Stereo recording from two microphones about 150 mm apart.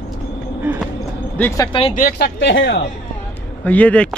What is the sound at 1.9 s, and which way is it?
Speech, 80° left.